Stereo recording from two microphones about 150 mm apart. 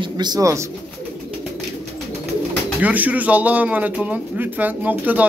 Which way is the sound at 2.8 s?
10° right (ahead or behind).